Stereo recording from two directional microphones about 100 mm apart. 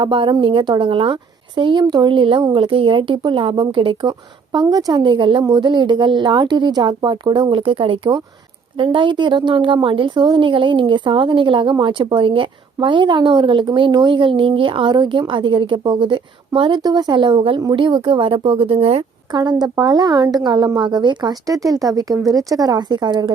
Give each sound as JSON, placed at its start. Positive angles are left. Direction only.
{"t": 0.0, "sound": "a woman's voice", "side_deg": -55}
{"t": 4.5, "sound": "a woman's voice", "side_deg": -40}
{"t": 5.4, "sound": "a woman's voice", "side_deg": -45}
{"t": 19.3, "sound": "a woman's voice", "side_deg": -40}